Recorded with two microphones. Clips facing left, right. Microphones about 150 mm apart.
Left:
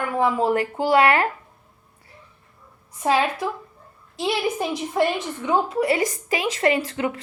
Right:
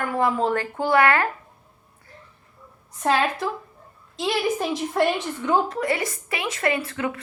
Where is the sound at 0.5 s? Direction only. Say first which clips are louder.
Left 2 dB; 20° left (ahead or behind).